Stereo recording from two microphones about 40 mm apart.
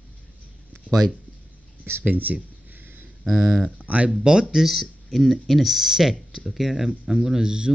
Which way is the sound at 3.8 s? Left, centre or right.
Right.